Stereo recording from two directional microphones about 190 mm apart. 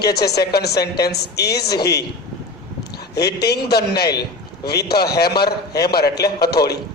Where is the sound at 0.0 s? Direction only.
60° left (ahead or behind).